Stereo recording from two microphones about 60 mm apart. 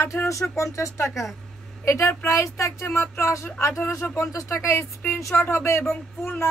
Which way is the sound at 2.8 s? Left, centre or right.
Left.